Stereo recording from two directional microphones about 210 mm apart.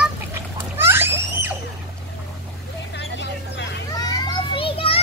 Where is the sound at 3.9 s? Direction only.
20° left (ahead or behind).